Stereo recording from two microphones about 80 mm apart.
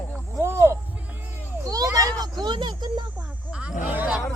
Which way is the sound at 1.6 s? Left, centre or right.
Right.